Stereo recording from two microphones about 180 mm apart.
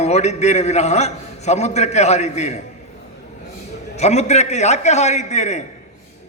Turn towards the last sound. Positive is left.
turn(degrees=40)  # may be behind; listen again after turning